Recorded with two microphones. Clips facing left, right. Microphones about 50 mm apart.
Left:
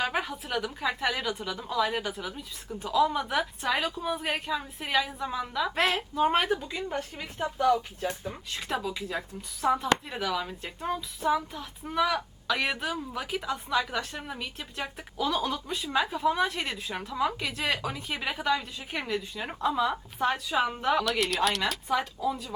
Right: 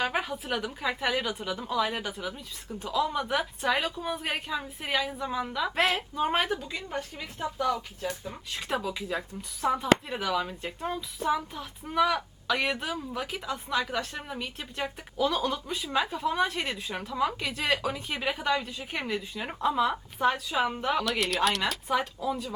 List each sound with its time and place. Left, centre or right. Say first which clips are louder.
0.0 s speech: even; centre
7.3 s speech: left 4 dB; centre
8.3 s speech: right 1 dB; centre
20.1 s speech: right 1 dB; centre